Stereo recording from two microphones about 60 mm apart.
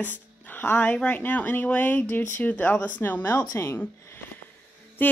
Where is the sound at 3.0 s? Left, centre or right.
Left.